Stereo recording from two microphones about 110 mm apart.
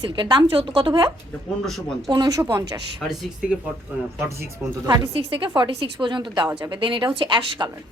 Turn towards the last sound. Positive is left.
turn(degrees=-45)  # may be behind; listen again after turning